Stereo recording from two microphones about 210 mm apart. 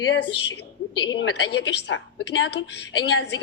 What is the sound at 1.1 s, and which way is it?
Speech, 55° left (ahead or behind).